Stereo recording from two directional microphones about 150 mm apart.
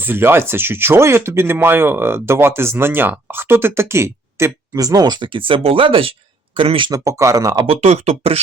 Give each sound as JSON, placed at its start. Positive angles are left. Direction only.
{"t": 0.0, "sound": "speech", "side_deg": -15}
{"t": 7.7, "sound": "speech", "side_deg": -45}